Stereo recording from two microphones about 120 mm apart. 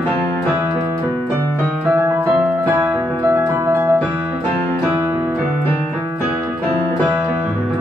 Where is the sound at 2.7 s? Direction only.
15° right (ahead or behind).